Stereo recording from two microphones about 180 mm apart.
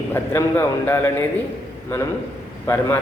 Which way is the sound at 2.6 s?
10° left (ahead or behind).